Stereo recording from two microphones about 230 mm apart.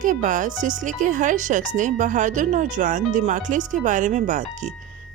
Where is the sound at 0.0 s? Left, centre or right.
Right.